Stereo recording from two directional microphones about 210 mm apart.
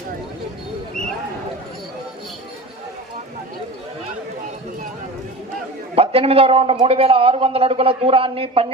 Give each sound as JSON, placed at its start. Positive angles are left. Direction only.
{"t": 5.9, "sound": "a man's voice", "side_deg": -30}